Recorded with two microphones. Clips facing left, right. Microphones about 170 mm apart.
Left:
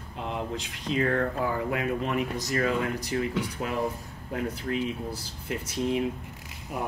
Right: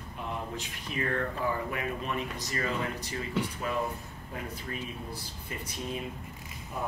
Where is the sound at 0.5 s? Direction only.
75° left (ahead or behind).